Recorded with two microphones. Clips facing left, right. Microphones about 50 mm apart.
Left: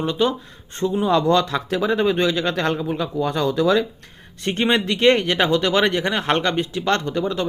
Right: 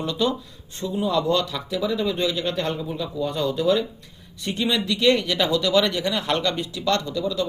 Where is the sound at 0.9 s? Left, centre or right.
Left.